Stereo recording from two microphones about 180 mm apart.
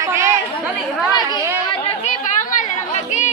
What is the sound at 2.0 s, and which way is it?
Chatter, 45° left (ahead or behind).